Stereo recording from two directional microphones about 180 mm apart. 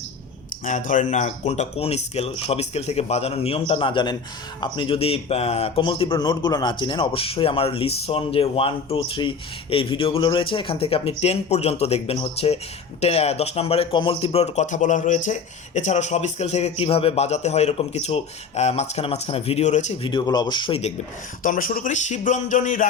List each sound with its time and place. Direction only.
0.6 s speech: 45° left (ahead or behind)
20.1 s speech: 25° left (ahead or behind)
21.4 s music: 50° left (ahead or behind)